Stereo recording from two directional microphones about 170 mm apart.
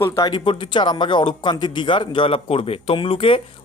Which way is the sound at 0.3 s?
30° left (ahead or behind).